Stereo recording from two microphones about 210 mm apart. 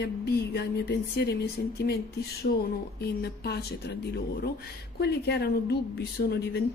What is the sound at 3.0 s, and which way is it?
A woman's voice, 50° left (ahead or behind).